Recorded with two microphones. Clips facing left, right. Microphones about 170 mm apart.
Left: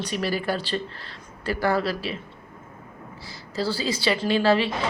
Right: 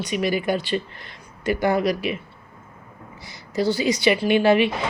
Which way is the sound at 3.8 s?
20° right (ahead or behind).